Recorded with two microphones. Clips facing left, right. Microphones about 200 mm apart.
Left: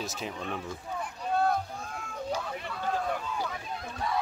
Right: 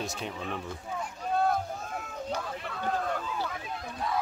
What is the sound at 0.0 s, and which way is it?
Speech, centre (ahead or behind).